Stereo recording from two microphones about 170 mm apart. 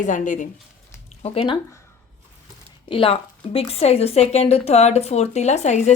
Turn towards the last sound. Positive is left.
turn(degrees=40)  # may be behind; listen again after turning